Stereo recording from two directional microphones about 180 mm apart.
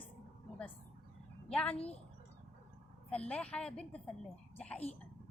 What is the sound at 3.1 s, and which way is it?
Speech, 5° left (ahead or behind).